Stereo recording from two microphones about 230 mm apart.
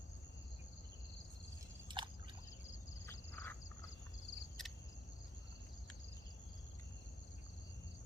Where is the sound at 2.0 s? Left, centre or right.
Right.